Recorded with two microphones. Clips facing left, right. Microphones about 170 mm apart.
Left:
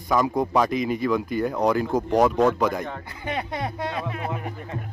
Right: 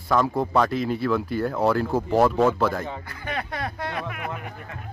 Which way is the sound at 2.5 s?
15° left (ahead or behind).